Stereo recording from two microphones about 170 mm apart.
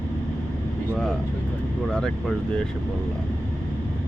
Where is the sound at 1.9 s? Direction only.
5° left (ahead or behind).